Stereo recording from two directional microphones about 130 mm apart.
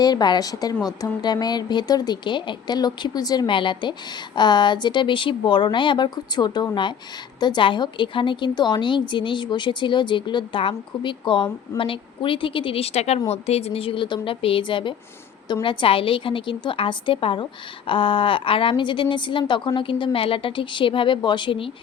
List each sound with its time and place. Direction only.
0.0 s a woman's voice: 30° left (ahead or behind)